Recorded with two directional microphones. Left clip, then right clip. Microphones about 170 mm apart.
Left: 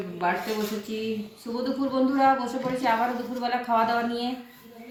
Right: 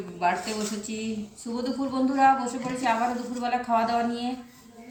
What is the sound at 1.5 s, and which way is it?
A woman's voice, 10° right (ahead or behind).